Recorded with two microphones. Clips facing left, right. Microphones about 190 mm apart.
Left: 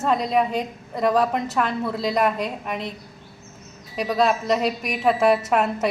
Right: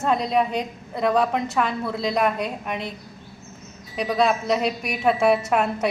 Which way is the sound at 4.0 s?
Centre (ahead or behind).